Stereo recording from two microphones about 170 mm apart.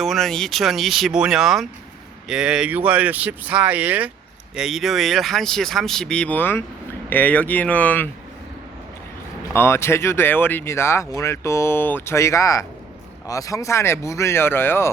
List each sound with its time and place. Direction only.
0.0 s speech: centre (ahead or behind)
9.5 s speech: 15° left (ahead or behind)